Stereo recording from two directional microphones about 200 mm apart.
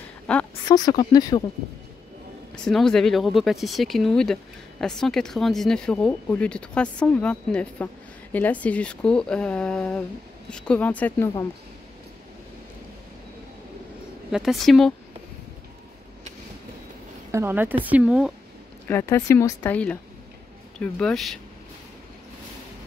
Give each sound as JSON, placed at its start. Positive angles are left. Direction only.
{"t": 0.3, "sound": "speech", "side_deg": 5}
{"t": 0.7, "sound": "speech", "side_deg": 20}
{"t": 2.5, "sound": "speech", "side_deg": 5}
{"t": 14.3, "sound": "speech", "side_deg": 0}
{"t": 17.3, "sound": "speech", "side_deg": -10}
{"t": 18.9, "sound": "speech", "side_deg": 10}